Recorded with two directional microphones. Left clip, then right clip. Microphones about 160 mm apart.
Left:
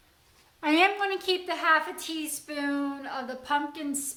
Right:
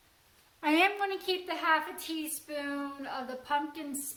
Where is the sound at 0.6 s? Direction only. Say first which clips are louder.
Left 3 dB; 15° right (ahead or behind).